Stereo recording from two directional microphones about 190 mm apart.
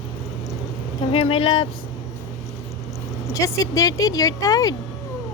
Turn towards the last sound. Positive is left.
turn(degrees=20)  # may be behind; listen again after turning